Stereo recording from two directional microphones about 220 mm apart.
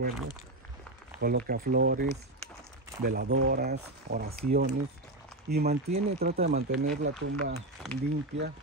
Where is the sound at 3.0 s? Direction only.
45° right (ahead or behind).